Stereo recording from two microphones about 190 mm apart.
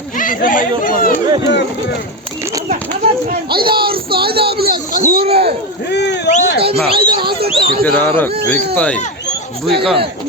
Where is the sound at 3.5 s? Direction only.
55° right (ahead or behind).